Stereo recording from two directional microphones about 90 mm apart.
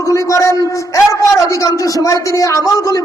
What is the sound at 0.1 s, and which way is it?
A man's voice, 35° left (ahead or behind).